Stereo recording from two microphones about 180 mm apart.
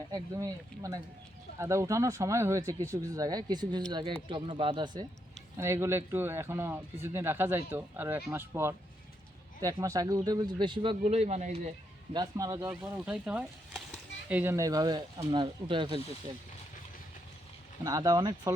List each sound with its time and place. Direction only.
0.1 s speech: 20° right (ahead or behind)
5.5 s speech: 15° right (ahead or behind); by 11.7 s 40° right (ahead or behind)
12.1 s speech: 20° right (ahead or behind)
12.7 s speech: 5° right (ahead or behind); by 16.0 s 30° right (ahead or behind)
17.8 s speech: 20° right (ahead or behind)